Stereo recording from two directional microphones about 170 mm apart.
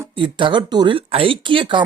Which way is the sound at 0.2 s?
30° right (ahead or behind).